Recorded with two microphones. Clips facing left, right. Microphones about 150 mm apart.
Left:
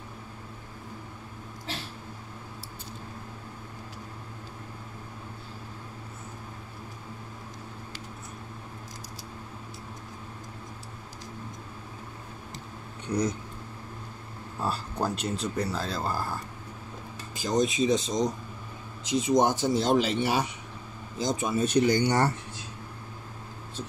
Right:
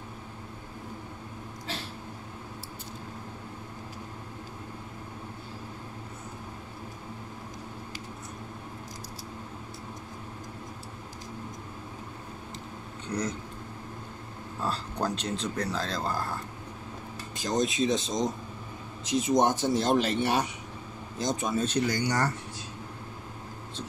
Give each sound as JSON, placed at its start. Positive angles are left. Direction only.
{"t": 14.6, "sound": "speech", "side_deg": 5}
{"t": 17.4, "sound": "speech", "side_deg": 0}